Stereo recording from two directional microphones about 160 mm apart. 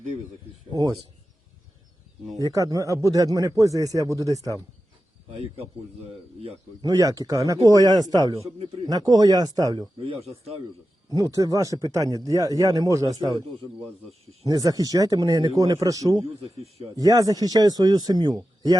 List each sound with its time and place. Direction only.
0.7 s speech: 25° right (ahead or behind)
2.5 s speech: 20° right (ahead or behind)
6.8 s speech: 20° right (ahead or behind)
10.0 s speech: 35° right (ahead or behind)
11.1 s speech: 20° right (ahead or behind)
14.4 s speech: 20° right (ahead or behind)
16.4 s speech: 35° right (ahead or behind)
17.0 s speech: 20° right (ahead or behind)